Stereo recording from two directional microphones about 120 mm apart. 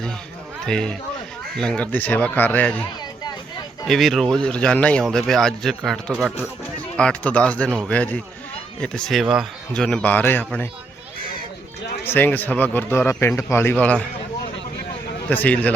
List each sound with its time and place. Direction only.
0.6 s a man's voice: 5° left (ahead or behind)
3.8 s a man's voice: centre (ahead or behind)
9.7 s a man's voice: 5° left (ahead or behind)
12.0 s a man's voice: 15° left (ahead or behind)
15.3 s a man's voice: 15° left (ahead or behind)